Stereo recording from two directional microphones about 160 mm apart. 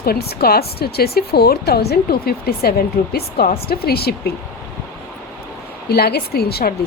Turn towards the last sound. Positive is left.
turn(degrees=75)  # may be behind; listen again after turning